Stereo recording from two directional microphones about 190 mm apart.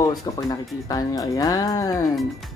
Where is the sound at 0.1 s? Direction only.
20° left (ahead or behind).